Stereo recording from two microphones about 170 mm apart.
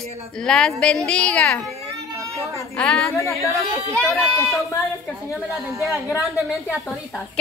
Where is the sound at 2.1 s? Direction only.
20° right (ahead or behind).